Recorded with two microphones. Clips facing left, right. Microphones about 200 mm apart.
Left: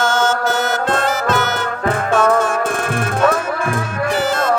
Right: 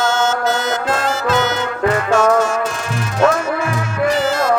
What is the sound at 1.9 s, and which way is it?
Music, 55° left (ahead or behind).